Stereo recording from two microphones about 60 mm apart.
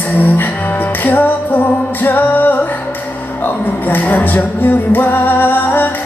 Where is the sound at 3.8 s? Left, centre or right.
Left.